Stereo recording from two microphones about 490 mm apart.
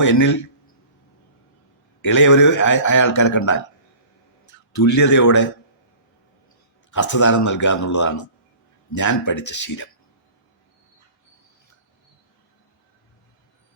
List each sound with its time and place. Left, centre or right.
0.0 s a man's voice: left
2.0 s a man's voice: left
6.9 s a man's voice: left